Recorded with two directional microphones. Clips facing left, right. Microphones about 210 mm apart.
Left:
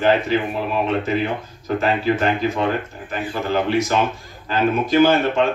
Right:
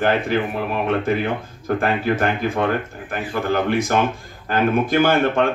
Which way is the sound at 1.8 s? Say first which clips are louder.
Left 1 dB; 55° right (ahead or behind).